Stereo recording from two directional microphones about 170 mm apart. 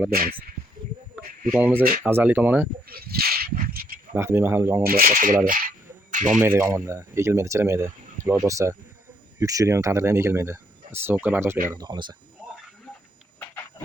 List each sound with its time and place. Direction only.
0.1 s speech: 60° right (ahead or behind)
1.5 s speech: 10° right (ahead or behind)
2.8 s a sound: 65° right (ahead or behind)
4.1 s speech: 15° right (ahead or behind)
4.8 s speech: 60° right (ahead or behind)
5.5 s a sound: 55° right (ahead or behind)
6.6 s speech: 15° right (ahead or behind)
11.7 s speech: 25° right (ahead or behind)